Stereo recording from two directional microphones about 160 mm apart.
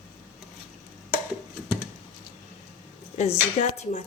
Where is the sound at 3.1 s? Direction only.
45° left (ahead or behind).